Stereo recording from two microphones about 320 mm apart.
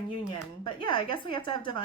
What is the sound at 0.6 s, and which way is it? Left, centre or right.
A woman's voice, centre.